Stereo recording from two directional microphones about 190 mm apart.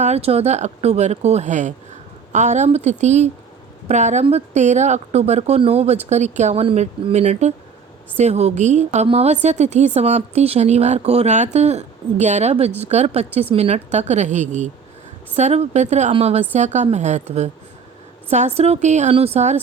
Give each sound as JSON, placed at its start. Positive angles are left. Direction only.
{"t": 0.0, "sound": "a woman's voice", "side_deg": -35}